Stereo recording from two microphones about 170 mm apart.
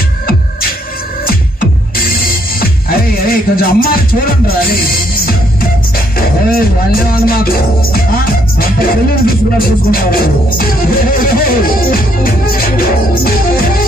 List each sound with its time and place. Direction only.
2.6 s speech: 60° left (ahead or behind)
6.1 s music: 60° left (ahead or behind)